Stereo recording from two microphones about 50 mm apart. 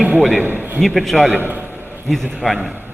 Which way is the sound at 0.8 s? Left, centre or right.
Centre.